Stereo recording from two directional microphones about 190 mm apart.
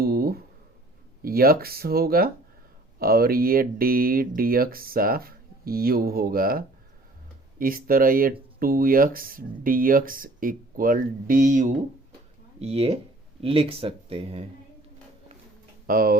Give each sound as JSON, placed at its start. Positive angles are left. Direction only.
{"t": 0.0, "sound": "a sound", "side_deg": -55}
{"t": 1.2, "sound": "speech", "side_deg": -50}
{"t": 15.9, "sound": "speech", "side_deg": -50}